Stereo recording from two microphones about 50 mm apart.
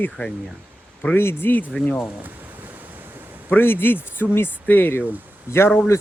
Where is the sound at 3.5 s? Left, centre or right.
Left.